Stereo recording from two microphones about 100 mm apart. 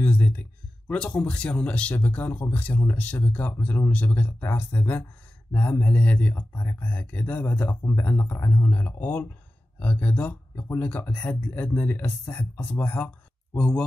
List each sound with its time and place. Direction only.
0.0 s speech: 15° left (ahead or behind)